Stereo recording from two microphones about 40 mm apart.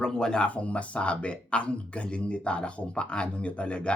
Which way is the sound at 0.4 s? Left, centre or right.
Left.